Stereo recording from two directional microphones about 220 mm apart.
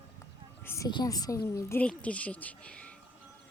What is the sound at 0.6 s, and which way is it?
A woman's voice, 15° left (ahead or behind).